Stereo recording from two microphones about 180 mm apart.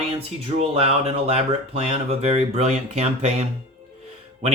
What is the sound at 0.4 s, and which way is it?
Speech, 35° right (ahead or behind).